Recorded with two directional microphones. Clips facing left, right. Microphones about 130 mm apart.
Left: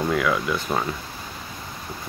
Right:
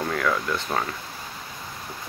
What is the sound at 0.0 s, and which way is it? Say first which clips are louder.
Speech: left 3 dB; 5° left (ahead or behind).